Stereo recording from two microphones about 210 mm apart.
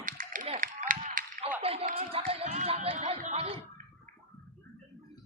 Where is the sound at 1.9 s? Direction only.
25° right (ahead or behind).